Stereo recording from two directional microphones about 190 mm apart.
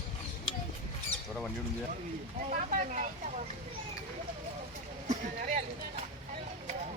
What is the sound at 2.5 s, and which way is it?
Speech, 45° right (ahead or behind).